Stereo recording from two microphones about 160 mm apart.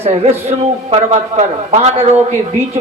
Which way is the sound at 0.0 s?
40° right (ahead or behind).